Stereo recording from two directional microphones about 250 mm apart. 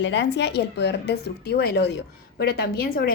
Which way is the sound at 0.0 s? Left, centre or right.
Left.